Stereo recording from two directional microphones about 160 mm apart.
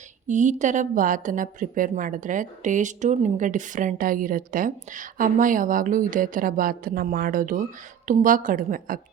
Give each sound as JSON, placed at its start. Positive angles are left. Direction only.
{"t": 0.3, "sound": "a woman's voice", "side_deg": -50}